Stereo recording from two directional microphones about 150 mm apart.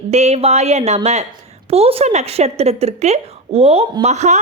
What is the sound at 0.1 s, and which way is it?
Speech, 45° right (ahead or behind).